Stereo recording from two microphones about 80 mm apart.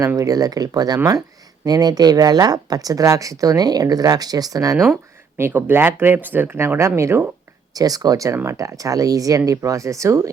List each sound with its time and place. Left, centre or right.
0.0 s speech: right
5.4 s speech: right
7.7 s speech: right